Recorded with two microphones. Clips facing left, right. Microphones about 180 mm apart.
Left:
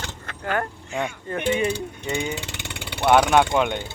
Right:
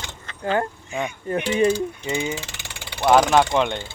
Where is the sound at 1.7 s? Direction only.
60° left (ahead or behind).